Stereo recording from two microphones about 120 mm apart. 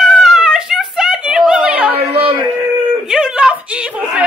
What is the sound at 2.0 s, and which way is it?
Music, 55° right (ahead or behind).